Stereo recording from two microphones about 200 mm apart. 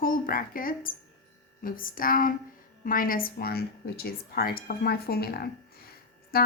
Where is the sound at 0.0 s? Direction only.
45° left (ahead or behind).